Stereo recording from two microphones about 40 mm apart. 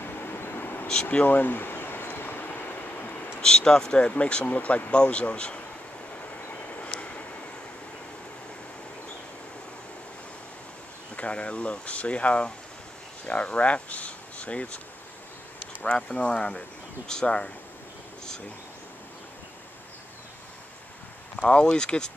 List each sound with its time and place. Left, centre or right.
0.0 s vehicle: left
1.2 s a sound: left
3.3 s speech: centre
7.0 s vehicle: left
11.1 s speech: left
16.1 s speech: left
21.4 s speech: left